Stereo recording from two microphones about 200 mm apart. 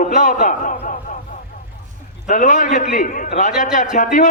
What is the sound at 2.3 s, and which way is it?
A man's voice, 40° left (ahead or behind).